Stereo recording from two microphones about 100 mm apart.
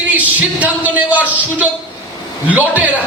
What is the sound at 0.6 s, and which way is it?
Speech, 15° right (ahead or behind).